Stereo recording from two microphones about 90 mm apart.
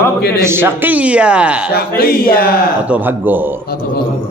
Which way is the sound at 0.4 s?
25° right (ahead or behind).